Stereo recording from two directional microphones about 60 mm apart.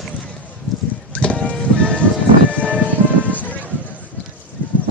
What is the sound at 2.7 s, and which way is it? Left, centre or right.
Music, right.